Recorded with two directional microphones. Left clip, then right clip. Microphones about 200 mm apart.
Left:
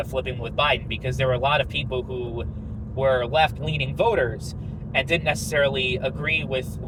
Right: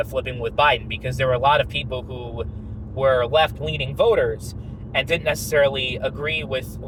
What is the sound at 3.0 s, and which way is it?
Speech, 25° right (ahead or behind).